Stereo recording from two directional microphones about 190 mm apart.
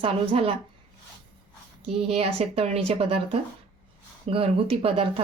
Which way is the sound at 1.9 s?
30° right (ahead or behind).